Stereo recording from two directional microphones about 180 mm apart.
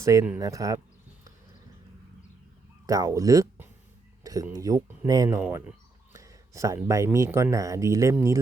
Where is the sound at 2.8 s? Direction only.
20° right (ahead or behind).